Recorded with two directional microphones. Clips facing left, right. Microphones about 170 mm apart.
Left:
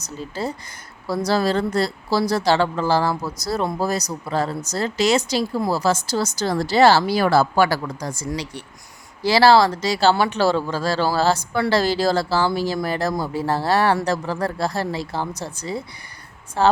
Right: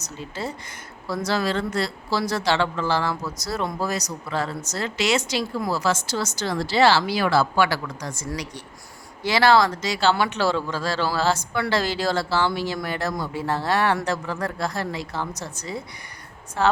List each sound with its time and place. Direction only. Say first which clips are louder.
0.2 s speech: left 4 dB; 35° left (ahead or behind)